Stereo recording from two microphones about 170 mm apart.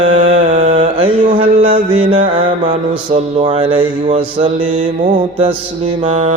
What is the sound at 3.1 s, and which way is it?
Speech, 35° right (ahead or behind).